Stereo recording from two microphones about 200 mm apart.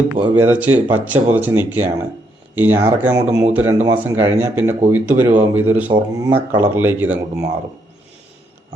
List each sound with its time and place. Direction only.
0.3 s speech: 10° right (ahead or behind)
5.9 s speech: 20° right (ahead or behind)
6.6 s speech: 10° right (ahead or behind)